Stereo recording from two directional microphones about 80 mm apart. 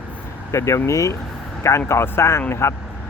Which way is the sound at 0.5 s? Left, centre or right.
Left.